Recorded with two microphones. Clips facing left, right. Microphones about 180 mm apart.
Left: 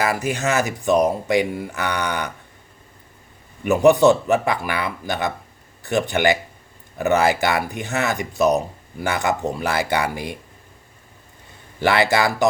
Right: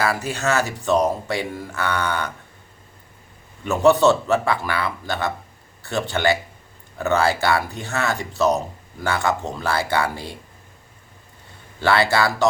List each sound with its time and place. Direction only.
0.0 s speech: 15° left (ahead or behind)
3.6 s speech: 15° left (ahead or behind)
11.8 s speech: 15° left (ahead or behind)